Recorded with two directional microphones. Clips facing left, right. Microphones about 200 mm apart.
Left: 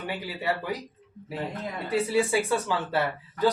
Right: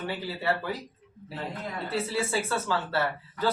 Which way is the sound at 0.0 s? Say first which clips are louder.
Even; 15° left (ahead or behind).